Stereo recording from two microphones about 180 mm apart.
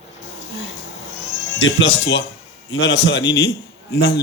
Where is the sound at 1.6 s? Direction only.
90° left.